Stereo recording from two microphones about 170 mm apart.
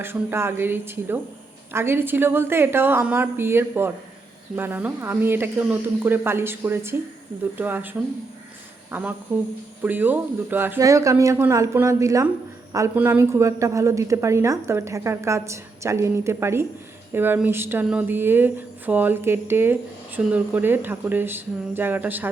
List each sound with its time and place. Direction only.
0.0 s a woman's voice: 15° right (ahead or behind)
8.9 s a woman's voice: 10° right (ahead or behind)